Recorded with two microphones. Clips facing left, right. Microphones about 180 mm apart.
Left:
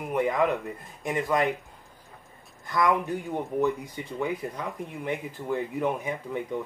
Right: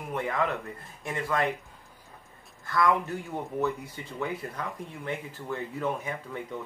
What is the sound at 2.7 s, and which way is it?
A man's voice, 15° left (ahead or behind).